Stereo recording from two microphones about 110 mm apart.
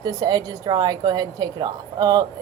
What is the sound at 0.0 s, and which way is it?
A woman's voice, 35° right (ahead or behind).